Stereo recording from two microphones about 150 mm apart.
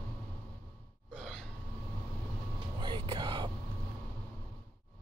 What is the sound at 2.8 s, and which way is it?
Whispering, 30° right (ahead or behind).